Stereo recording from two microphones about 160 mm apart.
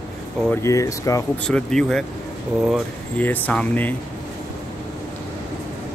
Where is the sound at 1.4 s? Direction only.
5° left (ahead or behind).